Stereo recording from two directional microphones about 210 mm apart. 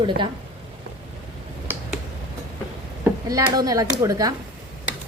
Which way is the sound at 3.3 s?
15° right (ahead or behind).